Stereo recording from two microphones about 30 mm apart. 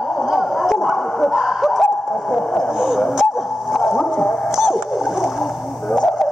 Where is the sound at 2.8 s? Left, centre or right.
Centre.